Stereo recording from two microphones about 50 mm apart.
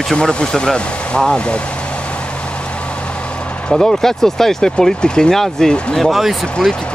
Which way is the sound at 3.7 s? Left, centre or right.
Centre.